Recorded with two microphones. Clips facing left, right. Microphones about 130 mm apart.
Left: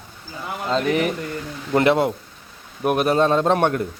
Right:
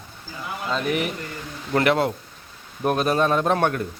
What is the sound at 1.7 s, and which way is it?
A man's voice, 20° left (ahead or behind).